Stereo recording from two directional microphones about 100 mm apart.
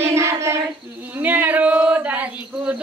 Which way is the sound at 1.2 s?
20° right (ahead or behind).